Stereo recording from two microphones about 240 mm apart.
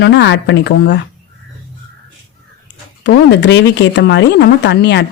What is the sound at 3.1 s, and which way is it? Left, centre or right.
Speech, left.